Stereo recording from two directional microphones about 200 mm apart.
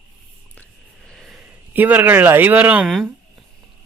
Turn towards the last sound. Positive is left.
turn(degrees=0)  # may be behind; listen again after turning